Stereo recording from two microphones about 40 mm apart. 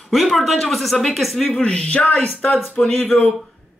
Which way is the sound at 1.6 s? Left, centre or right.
Left.